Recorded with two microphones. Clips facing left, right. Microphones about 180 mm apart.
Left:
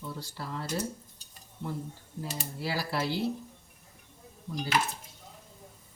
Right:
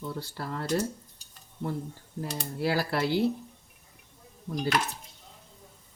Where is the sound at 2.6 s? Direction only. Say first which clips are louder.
Right 6 dB; 55° right (ahead or behind).